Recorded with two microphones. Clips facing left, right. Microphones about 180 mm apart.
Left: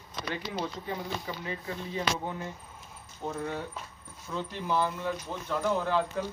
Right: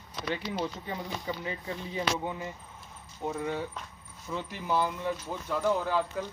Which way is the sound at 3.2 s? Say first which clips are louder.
Right 2 dB; 10° right (ahead or behind).